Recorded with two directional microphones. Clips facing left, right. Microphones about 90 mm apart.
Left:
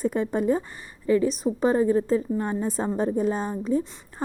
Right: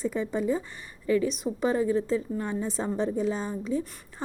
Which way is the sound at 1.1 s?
35° left (ahead or behind).